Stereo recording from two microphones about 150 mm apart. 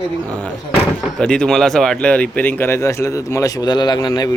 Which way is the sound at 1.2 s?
5° left (ahead or behind).